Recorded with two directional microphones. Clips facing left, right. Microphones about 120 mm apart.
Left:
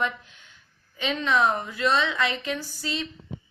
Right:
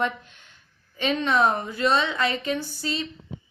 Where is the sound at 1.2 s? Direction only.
25° right (ahead or behind).